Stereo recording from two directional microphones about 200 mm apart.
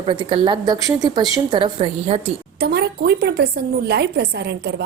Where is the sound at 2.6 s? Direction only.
55° right (ahead or behind).